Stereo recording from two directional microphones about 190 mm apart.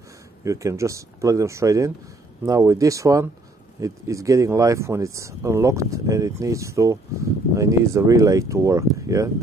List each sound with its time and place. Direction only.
0.4 s speech: 15° right (ahead or behind)